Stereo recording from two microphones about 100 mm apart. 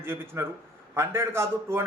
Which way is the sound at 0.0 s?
25° right (ahead or behind).